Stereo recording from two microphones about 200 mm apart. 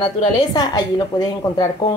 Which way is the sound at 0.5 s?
20° left (ahead or behind).